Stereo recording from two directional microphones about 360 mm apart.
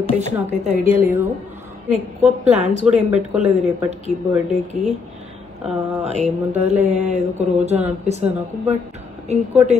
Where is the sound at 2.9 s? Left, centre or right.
Centre.